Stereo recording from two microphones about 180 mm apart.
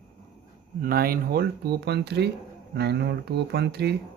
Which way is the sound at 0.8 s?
55° right (ahead or behind).